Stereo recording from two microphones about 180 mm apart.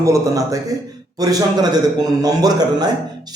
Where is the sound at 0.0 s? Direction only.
15° right (ahead or behind).